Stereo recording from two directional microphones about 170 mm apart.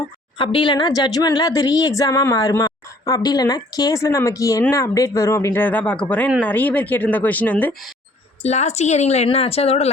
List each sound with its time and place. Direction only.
0.3 s speech: 30° left (ahead or behind); by 7.8 s 10° left (ahead or behind)
8.4 s a woman's voice: 40° left (ahead or behind)